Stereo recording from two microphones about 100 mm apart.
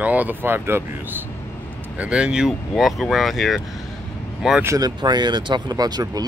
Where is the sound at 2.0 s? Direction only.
10° right (ahead or behind).